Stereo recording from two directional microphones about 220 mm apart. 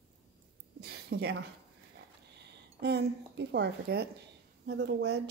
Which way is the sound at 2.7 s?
50° right (ahead or behind).